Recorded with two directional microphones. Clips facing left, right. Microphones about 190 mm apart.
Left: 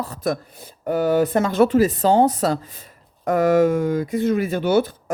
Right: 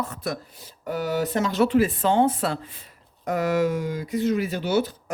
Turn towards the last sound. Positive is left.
turn(degrees=55)  # may be behind; listen again after turning